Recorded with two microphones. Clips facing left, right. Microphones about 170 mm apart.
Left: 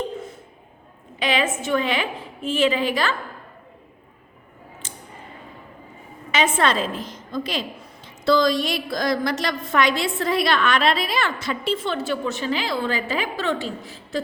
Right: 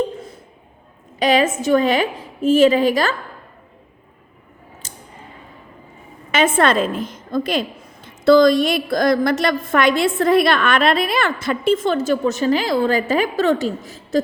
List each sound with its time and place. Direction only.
1.2 s a woman's voice: 40° right (ahead or behind)
4.8 s a sound: 40° right (ahead or behind)
6.3 s a woman's voice: 50° right (ahead or behind)